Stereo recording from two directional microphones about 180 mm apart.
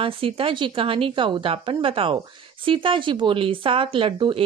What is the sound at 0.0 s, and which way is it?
A woman's voice, 30° right (ahead or behind).